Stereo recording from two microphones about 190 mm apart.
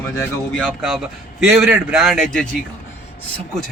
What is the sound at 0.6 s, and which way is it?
A man's voice, centre (ahead or behind).